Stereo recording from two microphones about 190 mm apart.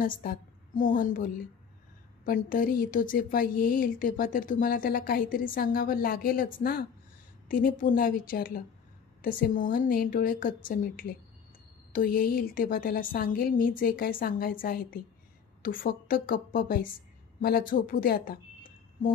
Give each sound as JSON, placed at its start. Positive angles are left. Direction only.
{"t": 0.0, "sound": "a woman's voice", "side_deg": 45}